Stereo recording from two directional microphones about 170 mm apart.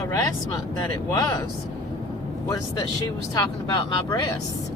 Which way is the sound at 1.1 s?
20° left (ahead or behind).